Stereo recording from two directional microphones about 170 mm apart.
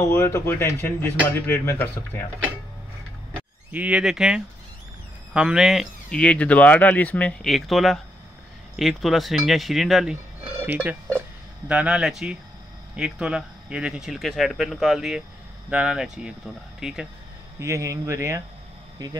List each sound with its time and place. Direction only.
0.0 s speech: 15° left (ahead or behind)
3.7 s speech: 10° right (ahead or behind)
17.6 s speech: 20° right (ahead or behind)